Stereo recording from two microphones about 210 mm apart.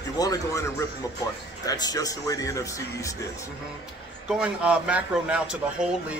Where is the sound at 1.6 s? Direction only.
20° left (ahead or behind).